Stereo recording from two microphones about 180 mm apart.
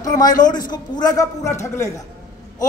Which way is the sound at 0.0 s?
20° left (ahead or behind).